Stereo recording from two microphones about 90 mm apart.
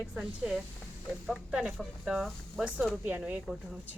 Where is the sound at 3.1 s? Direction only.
15° right (ahead or behind).